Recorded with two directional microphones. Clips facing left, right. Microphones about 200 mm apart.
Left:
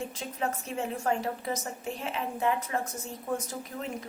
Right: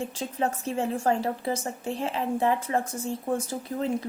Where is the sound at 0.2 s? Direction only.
30° right (ahead or behind).